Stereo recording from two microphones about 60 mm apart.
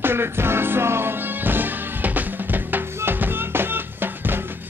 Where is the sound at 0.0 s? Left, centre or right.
Right.